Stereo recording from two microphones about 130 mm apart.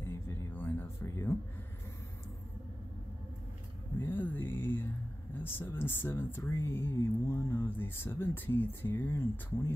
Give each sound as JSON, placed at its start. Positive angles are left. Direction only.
{"t": 0.0, "sound": "music", "side_deg": 20}
{"t": 4.0, "sound": "music", "side_deg": 15}
{"t": 5.4, "sound": "speech", "side_deg": 15}